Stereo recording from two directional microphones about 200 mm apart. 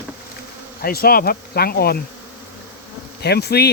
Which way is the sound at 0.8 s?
50° left (ahead or behind).